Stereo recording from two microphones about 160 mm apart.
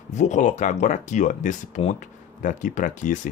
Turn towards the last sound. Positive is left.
turn(degrees=50)  # may be behind; listen again after turning